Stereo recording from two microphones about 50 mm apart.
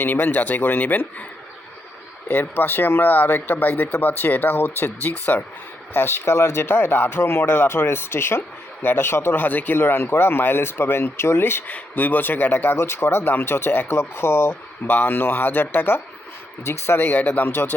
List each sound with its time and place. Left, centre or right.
0.0 s speech: left
2.2 s speech: left
5.9 s speech: left
9.3 s speech: left
9.7 s speech: left
11.7 s speech: left
12.7 s speech: left
13.9 s speech: left
14.8 s speech: left
16.6 s speech: left
17.5 s speech: left